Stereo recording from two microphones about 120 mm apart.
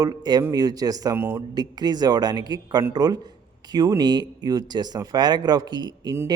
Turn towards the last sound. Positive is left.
turn(degrees=-35)  # may be behind; listen again after turning